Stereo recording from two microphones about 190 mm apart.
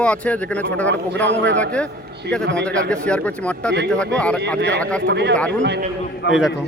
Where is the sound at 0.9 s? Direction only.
65° right (ahead or behind).